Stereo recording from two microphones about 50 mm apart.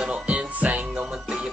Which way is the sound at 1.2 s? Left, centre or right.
Centre.